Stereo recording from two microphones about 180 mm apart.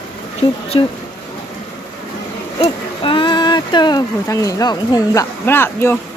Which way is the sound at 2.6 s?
30° left (ahead or behind).